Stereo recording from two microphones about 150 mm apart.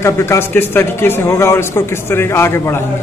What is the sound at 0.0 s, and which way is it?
Speech, 15° left (ahead or behind).